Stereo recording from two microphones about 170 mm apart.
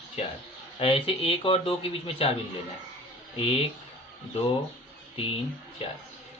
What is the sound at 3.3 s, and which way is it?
Speech, 35° left (ahead or behind).